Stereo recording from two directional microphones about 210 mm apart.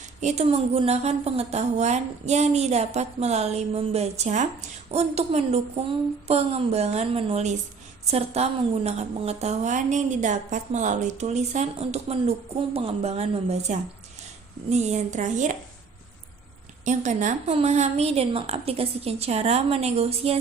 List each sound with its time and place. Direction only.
0.2 s a woman's voice: 30° right (ahead or behind)
16.8 s a woman's voice: 35° right (ahead or behind)